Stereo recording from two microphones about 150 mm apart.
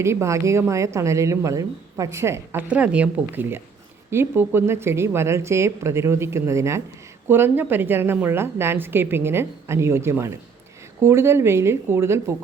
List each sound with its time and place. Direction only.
0.0 s a woman's voice: 20° right (ahead or behind)